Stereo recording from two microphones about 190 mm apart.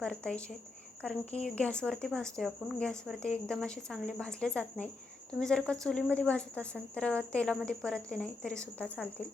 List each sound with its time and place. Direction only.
0.0 s a woman's voice: 5° left (ahead or behind)